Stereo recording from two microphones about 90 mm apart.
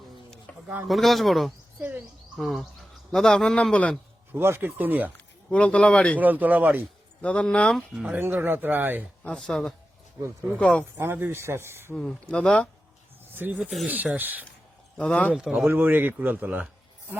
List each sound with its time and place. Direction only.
0.9 s a man's voice: centre (ahead or behind)
4.3 s speech: 25° right (ahead or behind)
5.1 s speech: 15° left (ahead or behind)
6.1 s speech: 20° right (ahead or behind)
7.2 s a man's voice: 15° left (ahead or behind)
8.0 s speech: 20° right (ahead or behind)
9.2 s a man's voice: 10° left (ahead or behind)
10.9 s speech: 25° right (ahead or behind)
12.3 s a man's voice: 10° left (ahead or behind)
13.3 s speech: 20° right (ahead or behind)
13.6 s speech: 10° right (ahead or behind)
14.9 s a man's voice: 15° left (ahead or behind)
15.3 s a man's voice: 5° right (ahead or behind)
15.5 s speech: 20° right (ahead or behind)